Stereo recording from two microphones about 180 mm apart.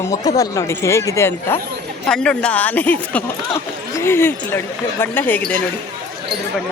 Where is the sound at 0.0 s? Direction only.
20° left (ahead or behind).